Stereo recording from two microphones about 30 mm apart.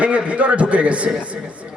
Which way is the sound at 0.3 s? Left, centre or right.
Right.